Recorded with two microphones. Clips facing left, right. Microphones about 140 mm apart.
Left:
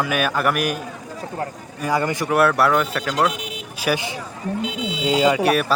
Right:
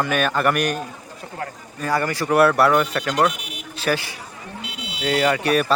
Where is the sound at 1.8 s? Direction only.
15° left (ahead or behind).